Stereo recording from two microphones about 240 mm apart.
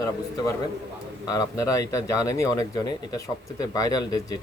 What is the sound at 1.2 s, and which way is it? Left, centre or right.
Speech, centre.